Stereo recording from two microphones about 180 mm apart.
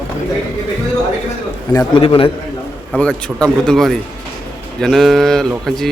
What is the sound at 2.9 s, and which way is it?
Speech, 5° left (ahead or behind).